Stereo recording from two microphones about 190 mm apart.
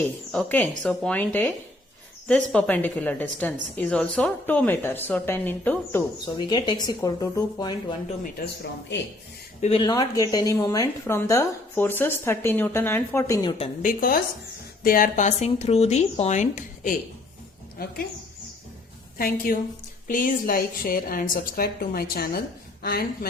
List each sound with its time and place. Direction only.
0.3 s a woman's voice: 5° left (ahead or behind)
6.3 s speech: 25° left (ahead or behind)
9.6 s speech: 30° left (ahead or behind)
13.8 s a woman's voice: 50° left (ahead or behind)
19.1 s a woman's voice: 50° left (ahead or behind)